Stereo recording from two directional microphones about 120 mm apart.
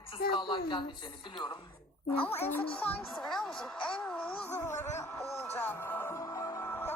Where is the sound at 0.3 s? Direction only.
45° left (ahead or behind).